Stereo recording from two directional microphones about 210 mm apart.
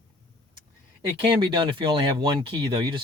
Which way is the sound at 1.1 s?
25° right (ahead or behind).